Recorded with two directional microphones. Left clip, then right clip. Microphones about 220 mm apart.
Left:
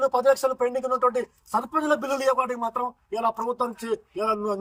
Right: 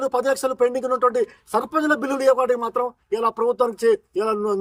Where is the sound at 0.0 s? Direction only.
25° right (ahead or behind).